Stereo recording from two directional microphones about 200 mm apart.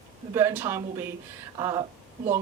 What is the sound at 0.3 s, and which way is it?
A woman's voice, 10° right (ahead or behind).